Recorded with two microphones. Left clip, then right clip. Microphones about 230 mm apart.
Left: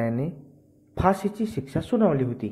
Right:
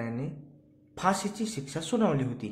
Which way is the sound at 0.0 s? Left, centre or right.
Left.